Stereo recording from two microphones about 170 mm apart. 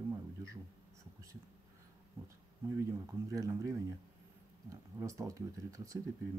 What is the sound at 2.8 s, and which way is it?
Speech, 15° right (ahead or behind).